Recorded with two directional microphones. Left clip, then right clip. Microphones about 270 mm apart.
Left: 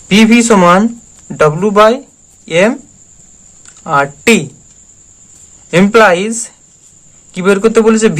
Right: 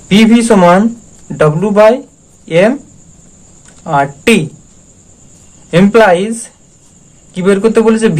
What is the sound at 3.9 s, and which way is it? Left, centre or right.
Speech, centre.